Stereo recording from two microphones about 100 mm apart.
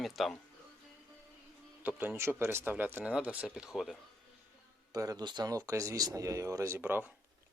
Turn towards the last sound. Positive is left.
turn(degrees=-20)  # may be behind; listen again after turning